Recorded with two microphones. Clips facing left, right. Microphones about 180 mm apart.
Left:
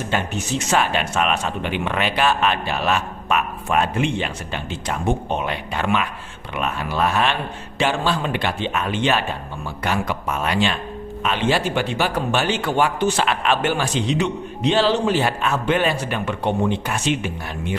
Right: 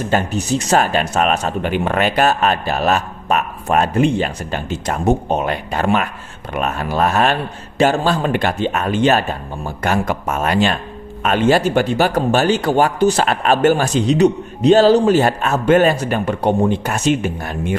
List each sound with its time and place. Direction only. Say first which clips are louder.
0.1 s speech: right 6 dB; 40° right (ahead or behind)